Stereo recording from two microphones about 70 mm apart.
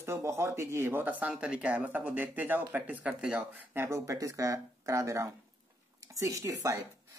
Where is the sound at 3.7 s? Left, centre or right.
Right.